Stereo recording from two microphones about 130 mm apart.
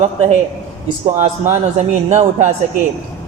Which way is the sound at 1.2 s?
65° right (ahead or behind).